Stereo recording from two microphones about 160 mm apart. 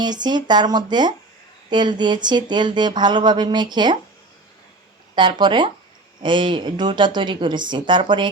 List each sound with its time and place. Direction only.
0.0 s speech: 25° right (ahead or behind)
5.1 s speech: 30° right (ahead or behind)